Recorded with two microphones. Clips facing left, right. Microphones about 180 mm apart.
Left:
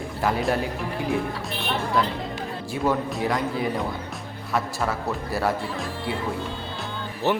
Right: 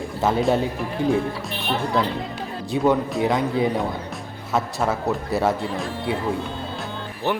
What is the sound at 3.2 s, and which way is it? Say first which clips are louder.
Speech: right 5 dB; 20° right (ahead or behind).